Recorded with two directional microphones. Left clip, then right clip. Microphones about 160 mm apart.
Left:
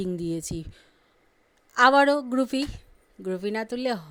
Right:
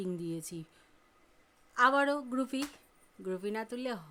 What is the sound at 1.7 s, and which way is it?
Speech, 40° left (ahead or behind).